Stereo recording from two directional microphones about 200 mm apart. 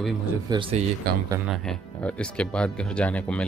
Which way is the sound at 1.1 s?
50° right (ahead or behind).